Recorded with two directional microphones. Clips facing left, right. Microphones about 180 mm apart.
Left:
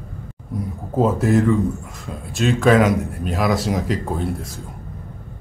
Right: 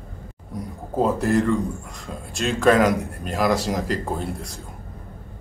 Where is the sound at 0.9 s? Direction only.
Centre (ahead or behind).